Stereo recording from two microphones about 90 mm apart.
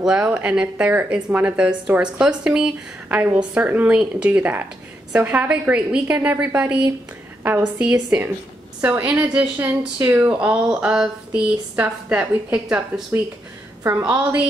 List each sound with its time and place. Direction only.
0.0 s a woman's voice: 10° right (ahead or behind)
7.8 s a woman's voice: 10° right (ahead or behind)
14.0 s a woman's voice: 15° right (ahead or behind)